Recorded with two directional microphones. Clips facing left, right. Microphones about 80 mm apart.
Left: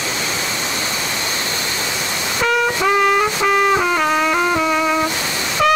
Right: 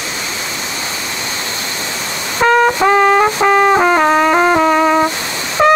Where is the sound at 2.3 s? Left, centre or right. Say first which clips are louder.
Right 7 dB; right.